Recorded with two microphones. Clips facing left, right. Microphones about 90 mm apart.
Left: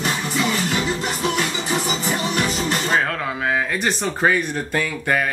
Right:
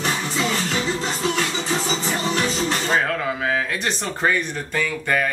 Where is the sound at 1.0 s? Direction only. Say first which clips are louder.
Left 1 dB; 10° left (ahead or behind).